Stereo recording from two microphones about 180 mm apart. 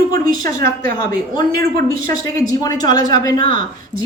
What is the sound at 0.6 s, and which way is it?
Speech, 55° right (ahead or behind).